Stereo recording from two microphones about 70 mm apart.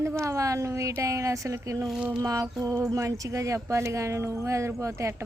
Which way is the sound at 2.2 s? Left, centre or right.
Right.